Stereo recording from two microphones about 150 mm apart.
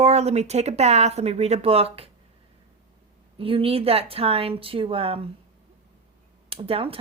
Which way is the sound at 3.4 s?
40° right (ahead or behind).